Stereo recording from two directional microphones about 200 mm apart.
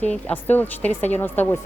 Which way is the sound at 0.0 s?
5° left (ahead or behind).